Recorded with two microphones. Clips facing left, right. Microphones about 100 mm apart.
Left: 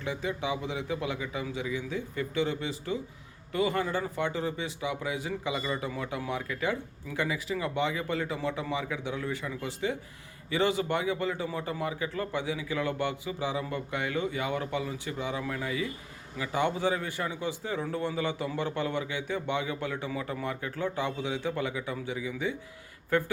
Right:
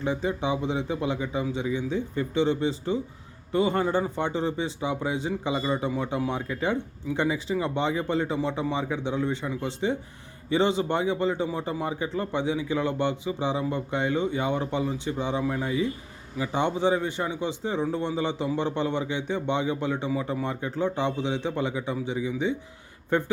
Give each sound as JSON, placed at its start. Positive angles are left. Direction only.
{"t": 0.0, "sound": "a man's voice", "side_deg": -35}